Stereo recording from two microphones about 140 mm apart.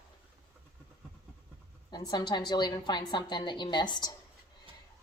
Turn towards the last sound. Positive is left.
turn(degrees=30)  # may be behind; listen again after turning